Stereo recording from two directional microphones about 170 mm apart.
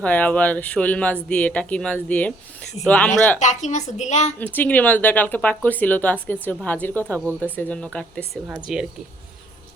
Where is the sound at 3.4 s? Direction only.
45° left (ahead or behind).